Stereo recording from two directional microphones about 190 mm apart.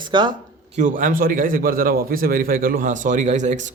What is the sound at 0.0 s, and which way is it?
Speech, 25° right (ahead or behind).